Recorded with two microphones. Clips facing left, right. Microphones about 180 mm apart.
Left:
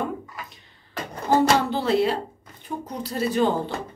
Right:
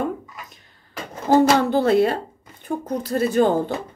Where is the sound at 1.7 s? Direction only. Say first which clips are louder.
Right 4 dB; 50° right (ahead or behind).